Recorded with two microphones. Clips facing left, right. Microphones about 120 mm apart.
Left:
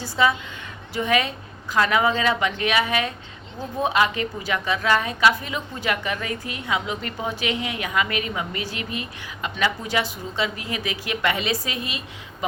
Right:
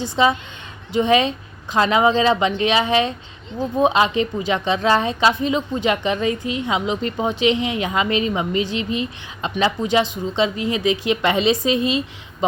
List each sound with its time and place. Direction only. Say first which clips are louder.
0.0 s a woman's voice: right 3 dB; 20° right (ahead or behind)